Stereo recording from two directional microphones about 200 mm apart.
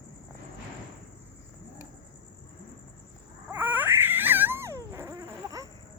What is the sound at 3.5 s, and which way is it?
Baby cry, 10° right (ahead or behind).